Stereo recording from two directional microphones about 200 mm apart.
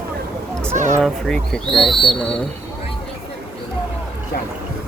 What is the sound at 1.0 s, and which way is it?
Speech, centre (ahead or behind).